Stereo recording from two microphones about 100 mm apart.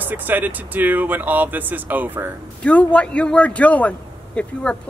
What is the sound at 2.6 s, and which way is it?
A woman's voice, 15° left (ahead or behind).